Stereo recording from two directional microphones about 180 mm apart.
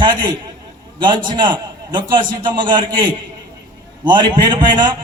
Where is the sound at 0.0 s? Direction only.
25° right (ahead or behind).